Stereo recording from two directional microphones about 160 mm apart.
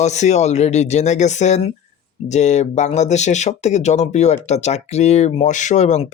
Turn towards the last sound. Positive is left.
turn(degrees=45)  # may be behind; listen again after turning